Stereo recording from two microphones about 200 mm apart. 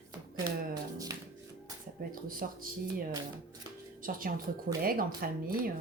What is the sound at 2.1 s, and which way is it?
Speech, 45° right (ahead or behind).